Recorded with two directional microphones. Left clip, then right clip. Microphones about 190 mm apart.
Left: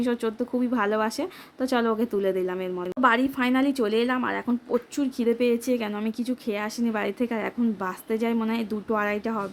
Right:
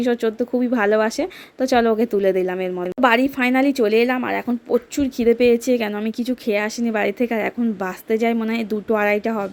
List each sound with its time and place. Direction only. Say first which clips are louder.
0.0 s speech: right 7 dB; 15° right (ahead or behind)